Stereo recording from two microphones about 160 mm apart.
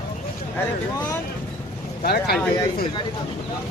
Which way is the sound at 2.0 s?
80° left.